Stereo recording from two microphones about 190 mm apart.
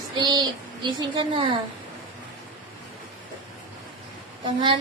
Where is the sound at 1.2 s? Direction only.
25° right (ahead or behind).